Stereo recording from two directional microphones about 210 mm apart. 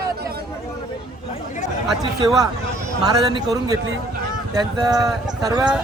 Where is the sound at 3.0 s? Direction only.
20° right (ahead or behind).